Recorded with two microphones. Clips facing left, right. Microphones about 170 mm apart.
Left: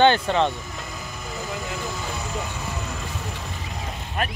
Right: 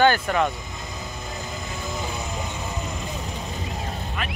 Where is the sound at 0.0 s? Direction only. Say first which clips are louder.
Left 1 dB; 25° left (ahead or behind).